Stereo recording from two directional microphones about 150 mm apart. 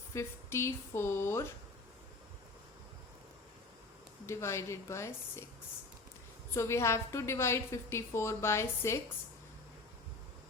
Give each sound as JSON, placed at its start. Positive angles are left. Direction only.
{"t": 0.1, "sound": "a woman's voice", "side_deg": 20}
{"t": 4.3, "sound": "a woman's voice", "side_deg": 20}
{"t": 6.5, "sound": "a woman's voice", "side_deg": 20}